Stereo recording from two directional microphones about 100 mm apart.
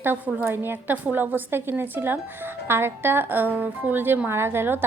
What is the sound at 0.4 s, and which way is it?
Speech, 20° right (ahead or behind).